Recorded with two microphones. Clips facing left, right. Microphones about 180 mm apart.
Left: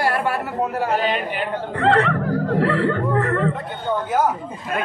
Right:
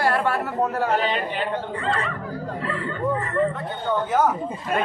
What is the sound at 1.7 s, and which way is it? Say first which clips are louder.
Speech: left 9 dB; 75° left (ahead or behind).